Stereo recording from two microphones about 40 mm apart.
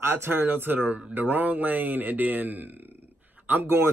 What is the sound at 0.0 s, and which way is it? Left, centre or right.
Speech, right.